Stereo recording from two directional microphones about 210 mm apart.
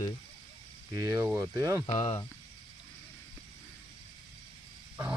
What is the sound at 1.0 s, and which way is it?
Speech, 15° right (ahead or behind).